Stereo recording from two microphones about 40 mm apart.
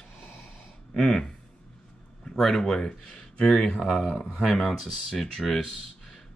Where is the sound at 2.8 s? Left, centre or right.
Centre.